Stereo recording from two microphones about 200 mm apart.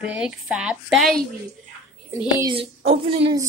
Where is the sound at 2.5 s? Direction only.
30° right (ahead or behind).